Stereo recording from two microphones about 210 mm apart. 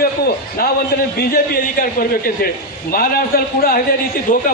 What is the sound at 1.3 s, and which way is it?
A man's voice, 45° left (ahead or behind).